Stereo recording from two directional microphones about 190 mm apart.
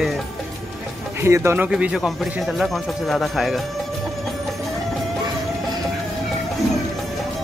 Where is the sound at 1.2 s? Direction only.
15° right (ahead or behind).